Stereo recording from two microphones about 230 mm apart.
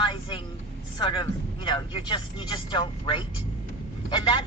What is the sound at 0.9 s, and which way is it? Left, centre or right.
Speech, left.